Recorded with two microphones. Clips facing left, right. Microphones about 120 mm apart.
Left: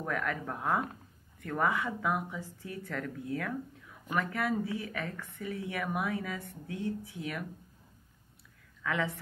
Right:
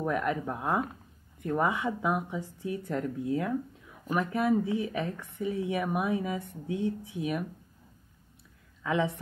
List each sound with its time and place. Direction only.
0.0 s speech: 20° right (ahead or behind)
8.8 s speech: 25° right (ahead or behind)